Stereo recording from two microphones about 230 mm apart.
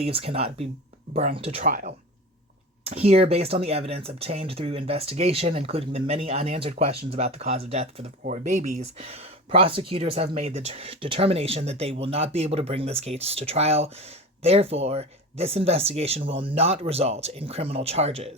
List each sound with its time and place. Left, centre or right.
0.0 s speech: right